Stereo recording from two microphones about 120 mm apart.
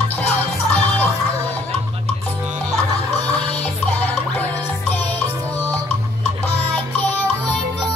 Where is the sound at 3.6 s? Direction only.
15° left (ahead or behind).